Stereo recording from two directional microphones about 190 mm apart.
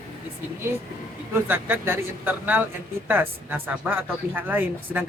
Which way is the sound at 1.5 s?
10° right (ahead or behind).